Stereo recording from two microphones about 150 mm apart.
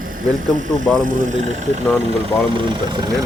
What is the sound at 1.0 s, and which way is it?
Speech, 60° right (ahead or behind).